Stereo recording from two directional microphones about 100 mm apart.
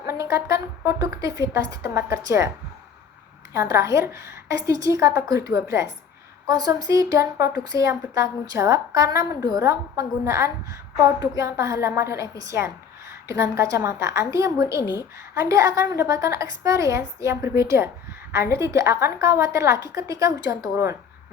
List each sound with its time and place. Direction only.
0.0 s speech: 30° right (ahead or behind)
3.5 s a woman's voice: 30° right (ahead or behind)